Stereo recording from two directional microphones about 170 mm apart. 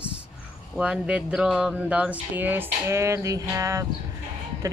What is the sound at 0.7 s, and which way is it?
Speech, 5° right (ahead or behind).